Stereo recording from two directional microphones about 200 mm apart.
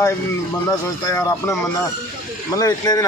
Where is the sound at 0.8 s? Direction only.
15° left (ahead or behind).